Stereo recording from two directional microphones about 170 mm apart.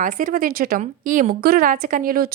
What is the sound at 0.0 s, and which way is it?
A woman's voice, 50° right (ahead or behind).